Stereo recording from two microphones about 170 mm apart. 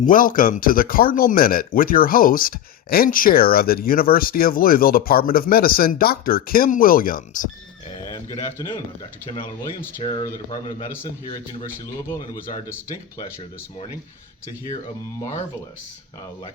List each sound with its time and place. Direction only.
0.0 s speech: 55° left (ahead or behind)
8.1 s speech: 15° left (ahead or behind)
10.0 s speech: 25° left (ahead or behind)
12.0 s speech: 20° left (ahead or behind)